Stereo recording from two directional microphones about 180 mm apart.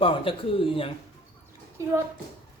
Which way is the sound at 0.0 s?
30° left (ahead or behind).